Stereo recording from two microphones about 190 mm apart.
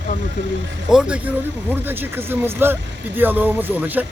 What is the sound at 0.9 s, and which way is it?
Speech, 5° right (ahead or behind).